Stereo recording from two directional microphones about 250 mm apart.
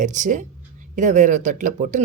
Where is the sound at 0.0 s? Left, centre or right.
Right.